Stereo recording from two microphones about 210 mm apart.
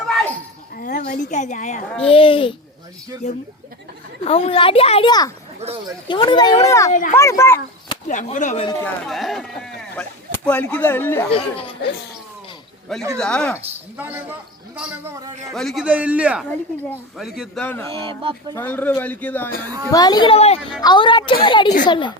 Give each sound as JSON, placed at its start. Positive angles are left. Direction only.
{"t": 0.8, "sound": "a child's voice", "side_deg": 35}
{"t": 5.5, "sound": "speech", "side_deg": -30}
{"t": 6.1, "sound": "a woman's voice", "side_deg": 20}
{"t": 6.9, "sound": "speech", "side_deg": 40}
{"t": 7.2, "sound": "speech", "side_deg": 15}
{"t": 8.0, "sound": "speech", "side_deg": 35}
{"t": 8.8, "sound": "a man's voice", "side_deg": 0}
{"t": 11.3, "sound": "a woman's voice", "side_deg": 25}
{"t": 13.1, "sound": "a man's voice", "side_deg": 5}
{"t": 14.0, "sound": "a man's voice", "side_deg": -10}
{"t": 15.5, "sound": "a man's voice", "side_deg": 0}
{"t": 17.9, "sound": "speech", "side_deg": -25}
{"t": 18.5, "sound": "speech", "side_deg": 10}
{"t": 19.9, "sound": "a woman's voice", "side_deg": 20}